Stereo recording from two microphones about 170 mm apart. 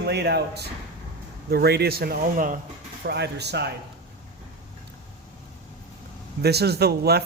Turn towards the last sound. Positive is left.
turn(degrees=-70)  # may be behind; listen again after turning